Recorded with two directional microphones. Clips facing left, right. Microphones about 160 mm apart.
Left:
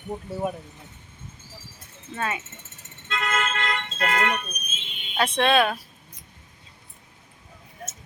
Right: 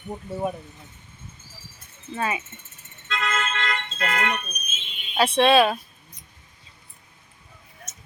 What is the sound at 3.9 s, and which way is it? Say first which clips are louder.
Speech: left 3 dB; 40° left (ahead or behind).